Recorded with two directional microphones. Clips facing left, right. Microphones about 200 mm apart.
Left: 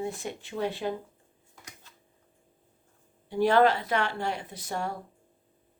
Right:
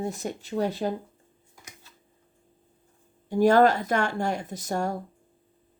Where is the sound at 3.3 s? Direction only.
45° right (ahead or behind).